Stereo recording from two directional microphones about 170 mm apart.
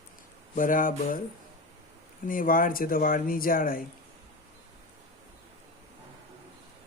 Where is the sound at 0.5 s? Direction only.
50° left (ahead or behind).